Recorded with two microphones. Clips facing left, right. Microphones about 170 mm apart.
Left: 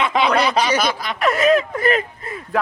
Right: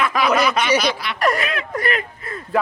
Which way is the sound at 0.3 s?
30° left (ahead or behind).